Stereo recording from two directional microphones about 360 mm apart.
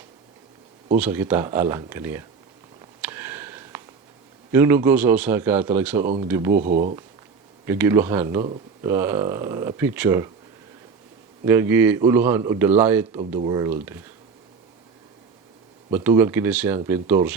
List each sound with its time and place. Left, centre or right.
0.9 s speech: centre
3.0 s a sound: centre
4.5 s speech: centre
6.6 s speech: right
7.7 s speech: centre
11.4 s speech: centre
15.9 s speech: centre